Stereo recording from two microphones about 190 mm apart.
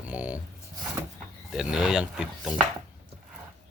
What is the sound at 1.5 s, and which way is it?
Speech, centre (ahead or behind).